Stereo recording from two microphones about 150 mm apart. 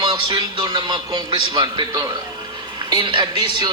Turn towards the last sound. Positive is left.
turn(degrees=-30)  # may be behind; listen again after turning